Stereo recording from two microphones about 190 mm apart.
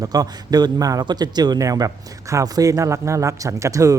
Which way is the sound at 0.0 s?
20° right (ahead or behind).